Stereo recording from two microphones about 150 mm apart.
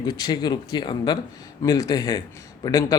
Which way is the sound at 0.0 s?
25° left (ahead or behind).